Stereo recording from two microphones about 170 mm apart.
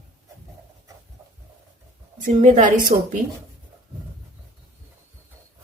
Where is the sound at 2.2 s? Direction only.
50° right (ahead or behind).